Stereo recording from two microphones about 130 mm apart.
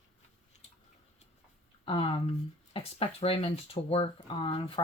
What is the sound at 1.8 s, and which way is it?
A woman's voice, 45° left (ahead or behind).